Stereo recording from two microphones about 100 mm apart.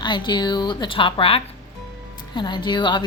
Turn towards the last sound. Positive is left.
turn(degrees=50)  # may be behind; listen again after turning